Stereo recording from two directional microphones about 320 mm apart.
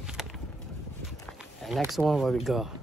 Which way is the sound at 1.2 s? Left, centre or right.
Centre.